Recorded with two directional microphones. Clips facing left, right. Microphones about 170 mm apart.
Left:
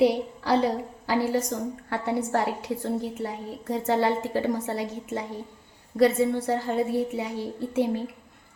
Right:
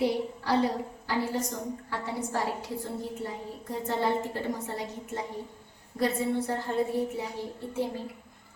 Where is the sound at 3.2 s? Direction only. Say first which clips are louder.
Left 4 dB; 80° left.